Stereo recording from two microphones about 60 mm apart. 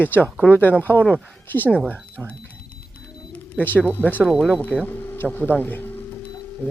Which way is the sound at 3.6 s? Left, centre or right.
Left.